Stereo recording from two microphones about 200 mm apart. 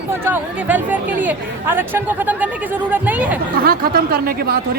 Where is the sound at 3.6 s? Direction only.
50° right (ahead or behind).